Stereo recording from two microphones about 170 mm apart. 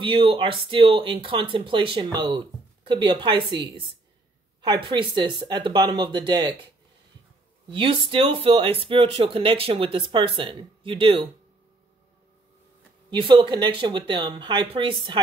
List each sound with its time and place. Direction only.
0.0 s speech: 30° right (ahead or behind)
7.7 s speech: 30° right (ahead or behind)
13.1 s speech: 30° right (ahead or behind)